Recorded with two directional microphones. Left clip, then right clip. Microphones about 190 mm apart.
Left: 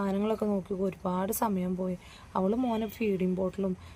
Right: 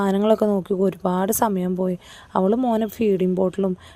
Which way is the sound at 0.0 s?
45° right (ahead or behind).